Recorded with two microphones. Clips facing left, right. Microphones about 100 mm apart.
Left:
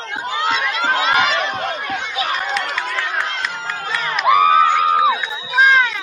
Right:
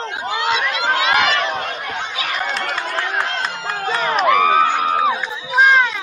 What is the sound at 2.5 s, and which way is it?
Run, 35° right (ahead or behind).